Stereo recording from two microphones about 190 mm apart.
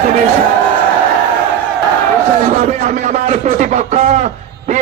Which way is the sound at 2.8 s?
40° right (ahead or behind).